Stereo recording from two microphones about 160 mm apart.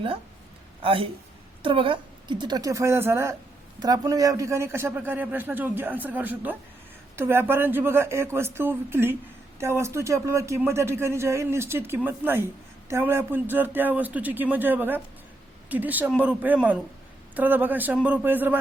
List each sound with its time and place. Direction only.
0.8 s a woman's voice: 35° right (ahead or behind); by 18.6 s 10° right (ahead or behind)